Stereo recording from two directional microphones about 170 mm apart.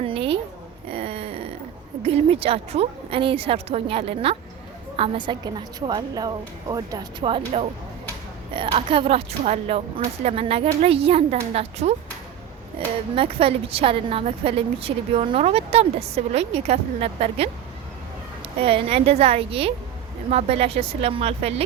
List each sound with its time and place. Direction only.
0.0 s a sound: 35° right (ahead or behind)
2.0 s a woman's voice: 35° right (ahead or behind)
13.1 s a woman's voice: 35° right (ahead or behind)
18.6 s a woman's voice: 35° right (ahead or behind)